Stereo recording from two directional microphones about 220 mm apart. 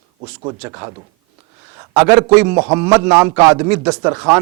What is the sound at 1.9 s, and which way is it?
A man's voice, 10° right (ahead or behind).